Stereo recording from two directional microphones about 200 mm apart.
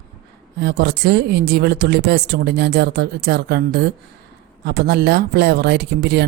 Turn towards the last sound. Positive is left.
turn(degrees=-55)  # may be behind; listen again after turning